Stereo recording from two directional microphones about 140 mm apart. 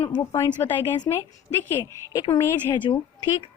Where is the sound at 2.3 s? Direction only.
35° left (ahead or behind).